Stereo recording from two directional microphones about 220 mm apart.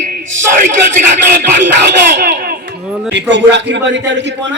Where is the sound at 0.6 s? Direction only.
35° right (ahead or behind).